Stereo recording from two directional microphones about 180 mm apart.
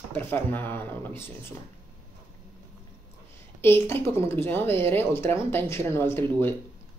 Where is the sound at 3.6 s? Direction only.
15° left (ahead or behind).